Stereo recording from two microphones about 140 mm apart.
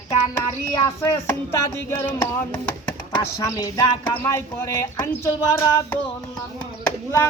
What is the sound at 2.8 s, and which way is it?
Speech, 20° left (ahead or behind).